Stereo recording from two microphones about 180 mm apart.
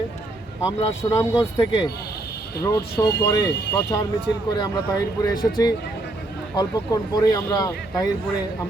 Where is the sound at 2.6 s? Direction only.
15° left (ahead or behind).